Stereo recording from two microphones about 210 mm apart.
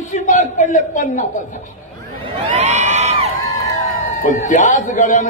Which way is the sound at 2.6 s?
30° right (ahead or behind).